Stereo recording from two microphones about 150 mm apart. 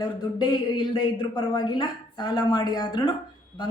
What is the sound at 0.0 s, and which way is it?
Speech, 25° left (ahead or behind).